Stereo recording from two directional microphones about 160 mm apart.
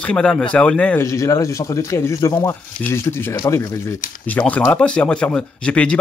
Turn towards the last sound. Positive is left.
turn(degrees=5)  # may be behind; listen again after turning